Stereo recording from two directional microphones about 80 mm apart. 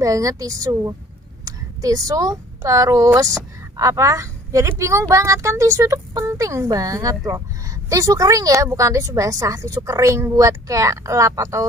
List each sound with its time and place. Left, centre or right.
0.0 s a woman's voice: right